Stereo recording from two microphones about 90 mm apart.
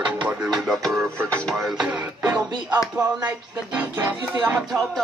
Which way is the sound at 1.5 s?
5° right (ahead or behind).